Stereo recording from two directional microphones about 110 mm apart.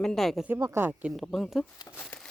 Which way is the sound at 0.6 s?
30° right (ahead or behind).